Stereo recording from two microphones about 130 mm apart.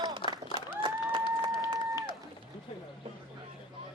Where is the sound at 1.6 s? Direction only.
25° right (ahead or behind).